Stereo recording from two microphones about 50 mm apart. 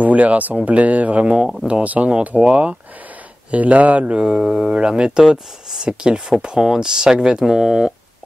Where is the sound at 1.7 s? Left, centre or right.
Right.